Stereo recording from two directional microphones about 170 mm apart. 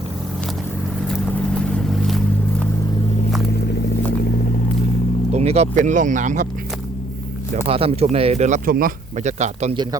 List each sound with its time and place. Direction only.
1.0 s vehicle: 5° left (ahead or behind)
5.3 s speech: 40° right (ahead or behind)
7.5 s speech: 35° right (ahead or behind)